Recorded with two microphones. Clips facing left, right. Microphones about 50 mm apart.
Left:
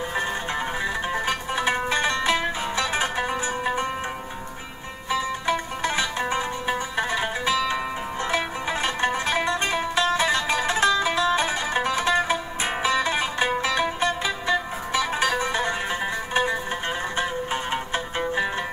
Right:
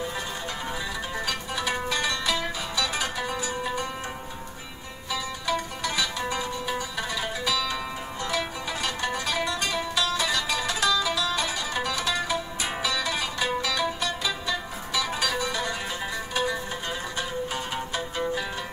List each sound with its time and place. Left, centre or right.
1.1 s music: left
5.1 s music: left
17.2 s music: left